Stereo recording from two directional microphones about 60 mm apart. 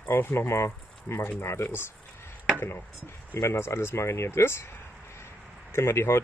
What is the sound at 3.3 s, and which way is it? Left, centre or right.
Speech, left.